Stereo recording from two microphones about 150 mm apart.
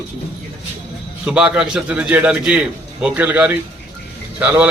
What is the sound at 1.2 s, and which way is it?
A man's voice, 5° right (ahead or behind).